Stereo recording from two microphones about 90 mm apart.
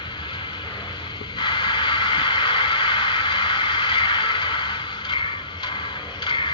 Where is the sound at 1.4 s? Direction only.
60° left (ahead or behind).